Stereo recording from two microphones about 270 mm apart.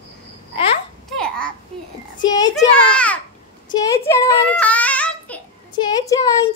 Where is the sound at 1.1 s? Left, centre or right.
Centre.